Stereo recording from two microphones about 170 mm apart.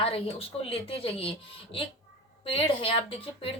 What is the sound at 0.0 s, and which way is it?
A woman's voice, 35° left (ahead or behind).